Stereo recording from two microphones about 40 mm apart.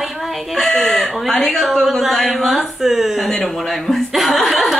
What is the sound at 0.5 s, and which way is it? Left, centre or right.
A woman's voice, centre.